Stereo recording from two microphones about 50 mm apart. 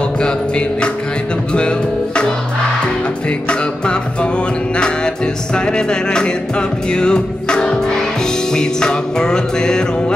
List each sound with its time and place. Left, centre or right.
0.2 s music: left
3.3 s music: left